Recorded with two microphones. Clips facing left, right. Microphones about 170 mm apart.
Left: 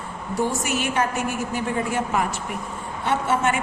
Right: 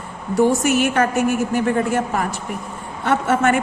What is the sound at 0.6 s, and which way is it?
A man's voice, 50° right (ahead or behind).